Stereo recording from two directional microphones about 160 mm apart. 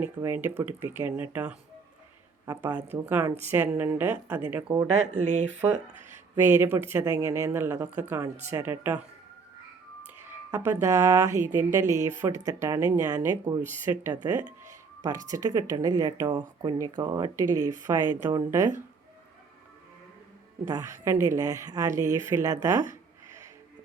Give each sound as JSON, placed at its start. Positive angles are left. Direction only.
{"t": 0.0, "sound": "a woman's voice", "side_deg": -10}
{"t": 2.5, "sound": "a woman's voice", "side_deg": -20}
{"t": 4.9, "sound": "speech", "side_deg": -45}
{"t": 6.3, "sound": "a woman's voice", "side_deg": -15}
{"t": 10.5, "sound": "a woman's voice", "side_deg": -15}
{"t": 20.7, "sound": "speech", "side_deg": -20}